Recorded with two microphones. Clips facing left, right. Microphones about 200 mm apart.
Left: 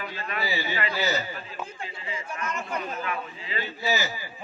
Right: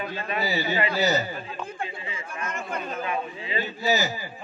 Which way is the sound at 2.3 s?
55° right (ahead or behind).